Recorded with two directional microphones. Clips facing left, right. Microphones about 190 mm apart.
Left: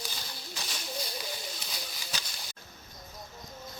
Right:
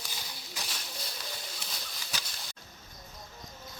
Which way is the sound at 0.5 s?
5° right (ahead or behind).